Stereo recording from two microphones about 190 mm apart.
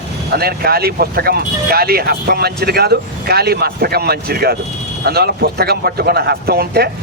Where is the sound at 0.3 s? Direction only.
55° right (ahead or behind).